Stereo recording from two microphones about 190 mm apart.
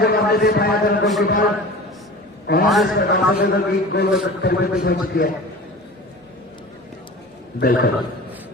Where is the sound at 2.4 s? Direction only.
50° left (ahead or behind).